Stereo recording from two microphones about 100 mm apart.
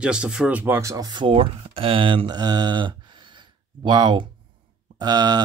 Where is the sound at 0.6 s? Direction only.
25° right (ahead or behind).